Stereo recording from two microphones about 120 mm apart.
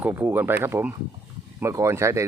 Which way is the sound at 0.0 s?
20° right (ahead or behind).